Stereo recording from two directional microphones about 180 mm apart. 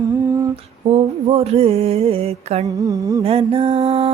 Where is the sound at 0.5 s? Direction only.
35° right (ahead or behind).